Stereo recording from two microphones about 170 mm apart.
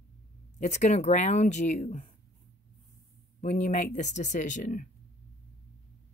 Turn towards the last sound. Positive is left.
turn(degrees=50)  # may be behind; listen again after turning